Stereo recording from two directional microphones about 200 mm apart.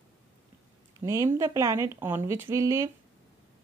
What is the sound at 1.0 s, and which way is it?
A woman's voice, 15° right (ahead or behind).